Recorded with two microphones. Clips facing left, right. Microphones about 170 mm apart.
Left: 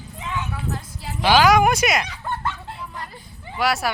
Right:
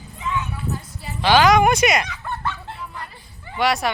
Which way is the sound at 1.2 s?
10° left (ahead or behind).